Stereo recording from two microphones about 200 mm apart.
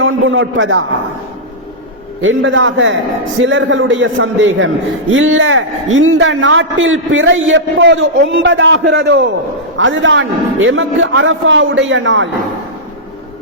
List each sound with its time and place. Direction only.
0.0 s a man's voice: 75° right (ahead or behind)
2.2 s a man's voice: 75° right (ahead or behind)